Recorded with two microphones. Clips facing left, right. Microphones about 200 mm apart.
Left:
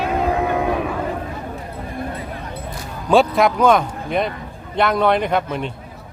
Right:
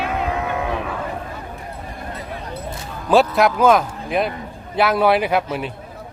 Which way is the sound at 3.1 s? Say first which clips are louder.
Even; centre (ahead or behind).